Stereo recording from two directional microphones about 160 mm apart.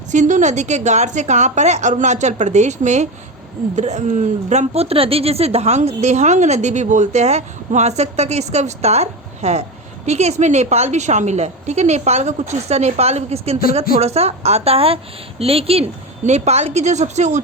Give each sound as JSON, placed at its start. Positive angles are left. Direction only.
{"t": 0.1, "sound": "a woman's voice", "side_deg": -50}